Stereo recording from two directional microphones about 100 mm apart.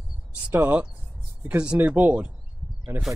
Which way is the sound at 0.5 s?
20° right (ahead or behind).